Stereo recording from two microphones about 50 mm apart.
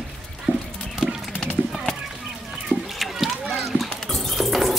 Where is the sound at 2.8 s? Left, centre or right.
Centre.